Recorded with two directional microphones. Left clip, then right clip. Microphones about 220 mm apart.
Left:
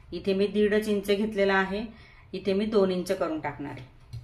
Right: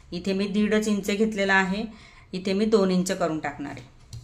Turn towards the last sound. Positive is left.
turn(degrees=-35)  # may be behind; listen again after turning